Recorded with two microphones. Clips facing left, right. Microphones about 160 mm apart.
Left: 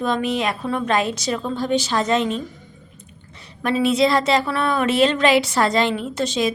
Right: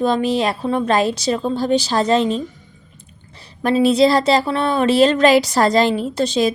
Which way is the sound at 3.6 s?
35° right (ahead or behind).